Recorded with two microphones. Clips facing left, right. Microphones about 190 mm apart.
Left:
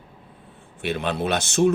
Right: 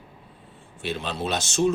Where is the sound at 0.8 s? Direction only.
60° left (ahead or behind).